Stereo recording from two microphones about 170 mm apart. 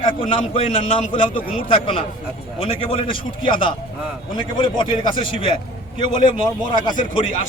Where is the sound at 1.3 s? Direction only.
55° left (ahead or behind).